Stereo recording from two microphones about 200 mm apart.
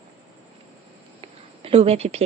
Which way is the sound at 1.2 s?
30° right (ahead or behind).